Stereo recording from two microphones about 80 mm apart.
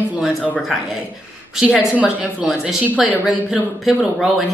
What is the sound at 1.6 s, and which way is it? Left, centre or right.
Speech, centre.